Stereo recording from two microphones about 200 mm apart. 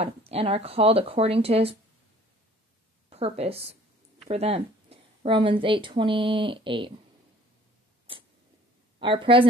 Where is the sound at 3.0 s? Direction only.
30° right (ahead or behind).